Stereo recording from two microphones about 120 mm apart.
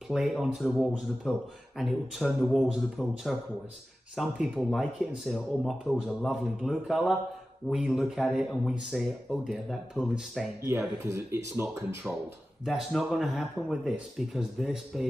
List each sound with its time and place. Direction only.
0.1 s speech: 5° right (ahead or behind)
11.0 s speech: 25° right (ahead or behind)
12.6 s speech: centre (ahead or behind)